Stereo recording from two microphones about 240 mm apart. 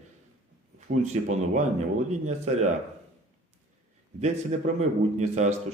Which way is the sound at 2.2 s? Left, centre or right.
Right.